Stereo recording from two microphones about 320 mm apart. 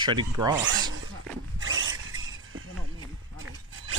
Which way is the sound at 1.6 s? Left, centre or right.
Right.